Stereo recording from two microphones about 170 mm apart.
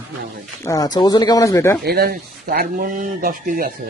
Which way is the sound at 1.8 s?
65° right (ahead or behind).